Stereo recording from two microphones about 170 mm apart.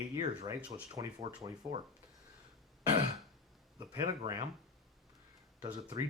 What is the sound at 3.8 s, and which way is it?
Speech, 25° right (ahead or behind).